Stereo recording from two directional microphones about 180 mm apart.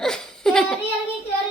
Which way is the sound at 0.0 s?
5° left (ahead or behind).